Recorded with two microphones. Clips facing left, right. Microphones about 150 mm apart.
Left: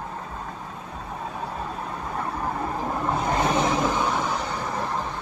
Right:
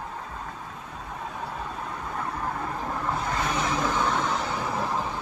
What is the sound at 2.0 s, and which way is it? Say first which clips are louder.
Vehicle: left 3 dB; 20° left (ahead or behind).